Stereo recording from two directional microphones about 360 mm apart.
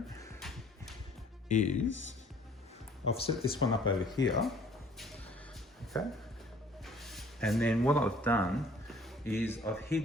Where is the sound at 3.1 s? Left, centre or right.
Centre.